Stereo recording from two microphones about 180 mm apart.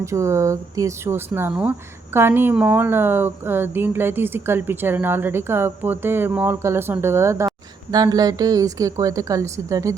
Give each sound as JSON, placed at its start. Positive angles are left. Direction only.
{"t": 0.0, "sound": "speech", "side_deg": -15}